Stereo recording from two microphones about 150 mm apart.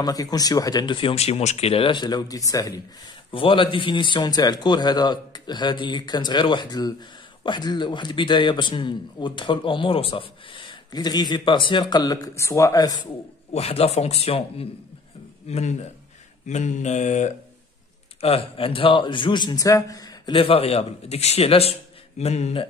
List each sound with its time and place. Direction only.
0.0 s a man's voice: 25° left (ahead or behind)
3.3 s a man's voice: 35° left (ahead or behind)
13.5 s a man's voice: 45° left (ahead or behind)
18.2 s a man's voice: 40° left (ahead or behind)